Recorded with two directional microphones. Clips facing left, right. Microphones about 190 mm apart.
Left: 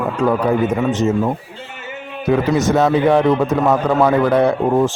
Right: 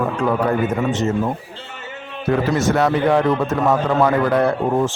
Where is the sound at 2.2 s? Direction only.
15° left (ahead or behind).